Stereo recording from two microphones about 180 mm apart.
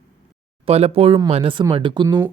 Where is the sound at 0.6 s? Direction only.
35° right (ahead or behind).